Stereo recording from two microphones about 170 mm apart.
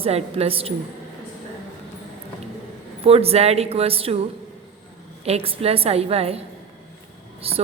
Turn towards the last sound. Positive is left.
turn(degrees=-35)  # may be behind; listen again after turning